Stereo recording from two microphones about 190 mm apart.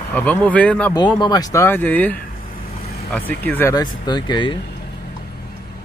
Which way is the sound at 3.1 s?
10° left (ahead or behind).